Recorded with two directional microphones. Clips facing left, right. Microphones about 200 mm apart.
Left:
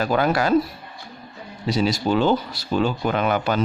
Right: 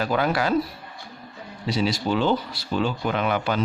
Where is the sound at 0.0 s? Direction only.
45° left (ahead or behind).